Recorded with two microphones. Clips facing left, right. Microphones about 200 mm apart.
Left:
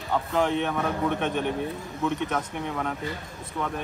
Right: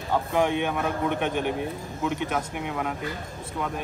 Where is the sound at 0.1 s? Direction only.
15° right (ahead or behind).